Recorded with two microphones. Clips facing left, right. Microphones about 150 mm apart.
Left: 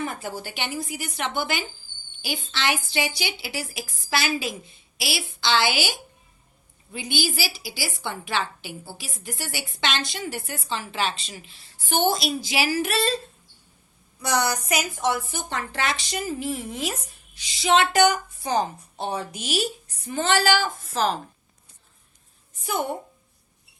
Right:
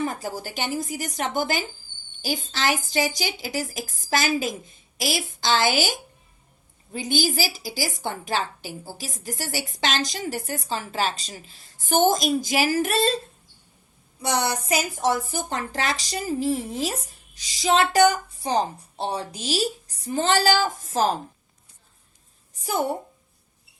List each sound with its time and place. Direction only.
0.0 s a woman's voice: 35° right (ahead or behind)
14.2 s a woman's voice: 25° right (ahead or behind); by 21.2 s 45° right (ahead or behind)
22.6 s a woman's voice: 35° right (ahead or behind)